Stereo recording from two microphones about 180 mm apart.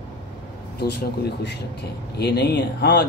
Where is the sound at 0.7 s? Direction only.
65° left (ahead or behind).